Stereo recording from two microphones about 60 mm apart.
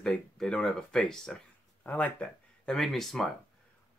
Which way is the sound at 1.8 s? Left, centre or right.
Left.